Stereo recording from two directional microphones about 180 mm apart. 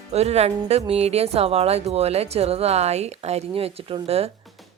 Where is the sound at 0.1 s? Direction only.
35° right (ahead or behind).